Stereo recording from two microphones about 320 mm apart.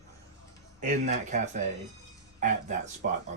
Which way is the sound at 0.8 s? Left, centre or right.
Right.